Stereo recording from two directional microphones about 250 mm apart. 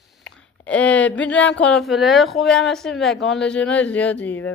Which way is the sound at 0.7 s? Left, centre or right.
Centre.